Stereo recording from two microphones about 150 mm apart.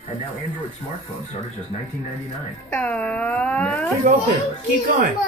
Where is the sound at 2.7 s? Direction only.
10° left (ahead or behind).